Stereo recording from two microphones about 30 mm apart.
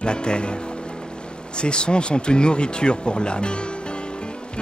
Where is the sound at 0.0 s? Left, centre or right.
Left.